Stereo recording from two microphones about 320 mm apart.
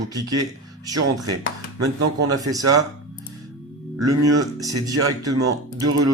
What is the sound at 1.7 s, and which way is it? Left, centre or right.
Speech, right.